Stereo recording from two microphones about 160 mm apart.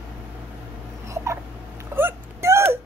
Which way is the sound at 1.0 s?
20° right (ahead or behind).